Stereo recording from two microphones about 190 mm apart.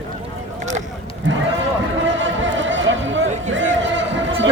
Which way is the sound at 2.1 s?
80° right.